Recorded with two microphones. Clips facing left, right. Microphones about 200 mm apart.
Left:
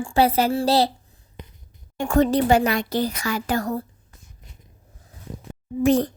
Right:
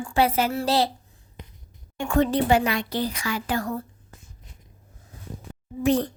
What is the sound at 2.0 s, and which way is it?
A woman's voice, 40° left (ahead or behind).